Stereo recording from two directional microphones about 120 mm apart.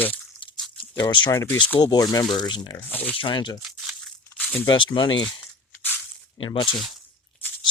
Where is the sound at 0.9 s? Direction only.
40° left (ahead or behind).